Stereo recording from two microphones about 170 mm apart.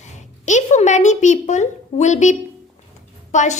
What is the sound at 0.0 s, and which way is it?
A child's voice, 45° left (ahead or behind).